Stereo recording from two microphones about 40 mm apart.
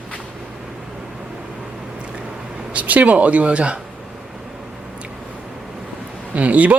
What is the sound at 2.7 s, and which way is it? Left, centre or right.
Speech, right.